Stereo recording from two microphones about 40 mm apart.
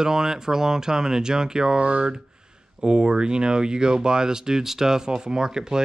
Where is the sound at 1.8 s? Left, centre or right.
Right.